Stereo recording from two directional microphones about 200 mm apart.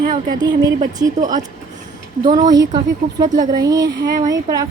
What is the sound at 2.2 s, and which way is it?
Speech, 20° right (ahead or behind).